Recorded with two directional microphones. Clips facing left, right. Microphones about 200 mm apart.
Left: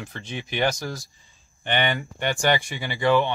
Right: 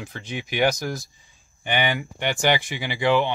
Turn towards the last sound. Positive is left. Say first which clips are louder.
# even
turn(degrees=-10)  # may be behind; listen again after turning